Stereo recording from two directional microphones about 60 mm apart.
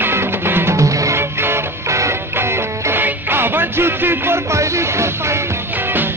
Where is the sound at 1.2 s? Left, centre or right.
Right.